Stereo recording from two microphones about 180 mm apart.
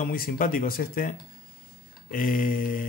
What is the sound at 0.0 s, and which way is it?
Speech, 50° left (ahead or behind).